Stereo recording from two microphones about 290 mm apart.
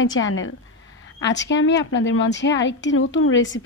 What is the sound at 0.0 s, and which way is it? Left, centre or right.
A woman's voice, left.